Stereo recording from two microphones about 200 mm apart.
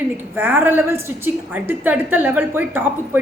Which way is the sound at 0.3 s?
10° right (ahead or behind).